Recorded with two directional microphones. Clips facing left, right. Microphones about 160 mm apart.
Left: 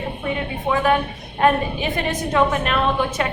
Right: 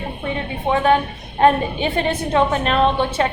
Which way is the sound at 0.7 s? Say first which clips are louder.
Right 3 dB; 30° right (ahead or behind).